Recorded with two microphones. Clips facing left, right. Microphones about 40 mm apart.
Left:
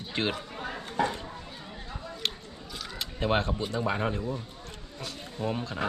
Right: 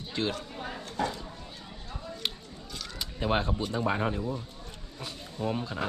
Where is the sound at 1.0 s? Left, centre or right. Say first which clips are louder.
Even; left.